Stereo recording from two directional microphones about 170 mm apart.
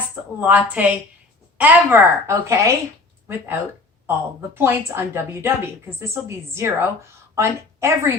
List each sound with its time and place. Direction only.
0.3 s a woman's voice: 10° right (ahead or behind)